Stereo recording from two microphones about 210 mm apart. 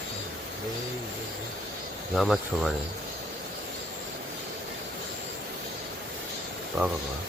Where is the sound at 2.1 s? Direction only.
Centre (ahead or behind).